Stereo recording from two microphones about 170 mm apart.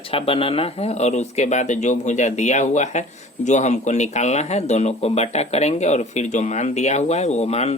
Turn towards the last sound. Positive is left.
turn(degrees=40)  # may be behind; listen again after turning